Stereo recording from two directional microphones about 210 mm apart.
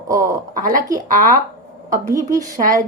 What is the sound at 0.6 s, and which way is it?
Speech, 40° right (ahead or behind).